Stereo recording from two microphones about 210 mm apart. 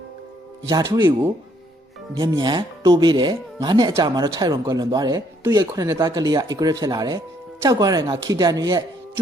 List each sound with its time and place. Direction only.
0.7 s speech: 15° right (ahead or behind)